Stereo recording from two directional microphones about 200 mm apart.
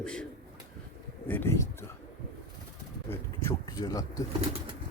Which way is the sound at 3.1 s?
15° left (ahead or behind).